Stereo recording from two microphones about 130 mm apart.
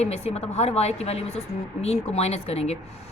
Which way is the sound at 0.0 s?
55° left (ahead or behind).